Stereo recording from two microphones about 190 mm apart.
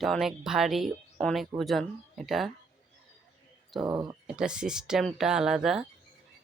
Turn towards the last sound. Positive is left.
turn(degrees=0)  # may be behind; listen again after turning